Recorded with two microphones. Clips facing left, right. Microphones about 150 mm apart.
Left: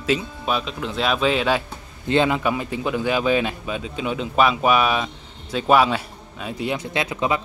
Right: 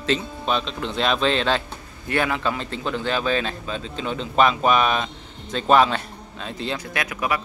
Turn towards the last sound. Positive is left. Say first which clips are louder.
# left 3 dB
turn(degrees=25)  # may be behind; listen again after turning